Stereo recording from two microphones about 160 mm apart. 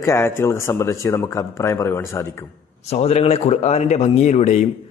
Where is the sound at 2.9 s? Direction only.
40° left (ahead or behind).